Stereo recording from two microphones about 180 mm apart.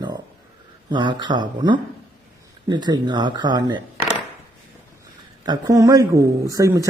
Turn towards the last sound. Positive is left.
turn(degrees=-20)  # may be behind; listen again after turning